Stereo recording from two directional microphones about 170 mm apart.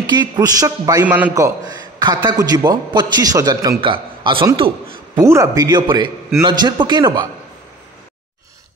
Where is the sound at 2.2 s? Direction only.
25° right (ahead or behind).